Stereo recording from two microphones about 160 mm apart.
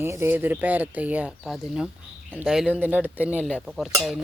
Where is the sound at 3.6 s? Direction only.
5° right (ahead or behind).